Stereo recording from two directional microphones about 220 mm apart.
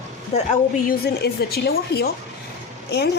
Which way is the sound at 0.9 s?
45° left (ahead or behind).